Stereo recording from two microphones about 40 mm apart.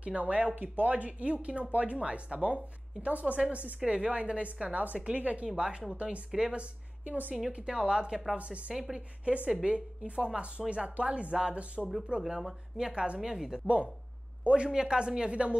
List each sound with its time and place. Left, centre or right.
0.0 s speech: right
0.6 s speech: right
5.6 s a woman's voice: right
8.7 s speech: centre
9.2 s speech: right
12.2 s speech: centre
12.7 s speech: right